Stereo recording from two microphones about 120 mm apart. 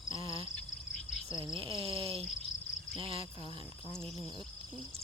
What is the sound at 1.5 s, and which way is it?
Speech, 45° right (ahead or behind).